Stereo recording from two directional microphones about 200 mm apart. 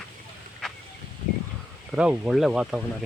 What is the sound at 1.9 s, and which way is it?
Speech, 5° right (ahead or behind).